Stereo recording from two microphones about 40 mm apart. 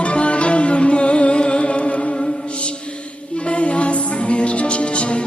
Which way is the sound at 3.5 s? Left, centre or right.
Left.